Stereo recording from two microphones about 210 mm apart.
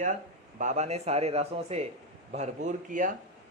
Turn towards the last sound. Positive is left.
turn(degrees=-35)  # may be behind; listen again after turning